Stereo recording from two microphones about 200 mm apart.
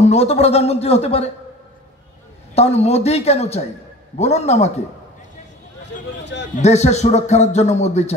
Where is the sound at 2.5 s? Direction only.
30° left (ahead or behind).